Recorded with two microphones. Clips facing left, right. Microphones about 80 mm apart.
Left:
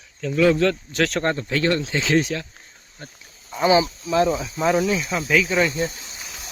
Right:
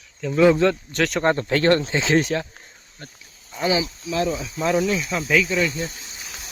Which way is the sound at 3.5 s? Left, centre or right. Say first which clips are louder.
Left 5 dB; left.